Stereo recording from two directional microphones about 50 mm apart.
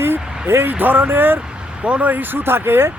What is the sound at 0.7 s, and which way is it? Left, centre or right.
Speech, right.